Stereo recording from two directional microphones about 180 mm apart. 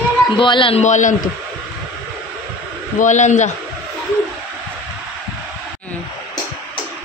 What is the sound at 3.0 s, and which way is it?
Speech, 40° left (ahead or behind).